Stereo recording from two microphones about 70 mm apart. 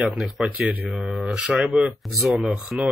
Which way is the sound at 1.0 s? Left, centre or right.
Centre.